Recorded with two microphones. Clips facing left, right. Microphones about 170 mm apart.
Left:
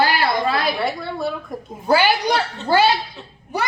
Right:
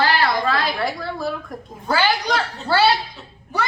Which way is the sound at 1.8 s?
15° left (ahead or behind).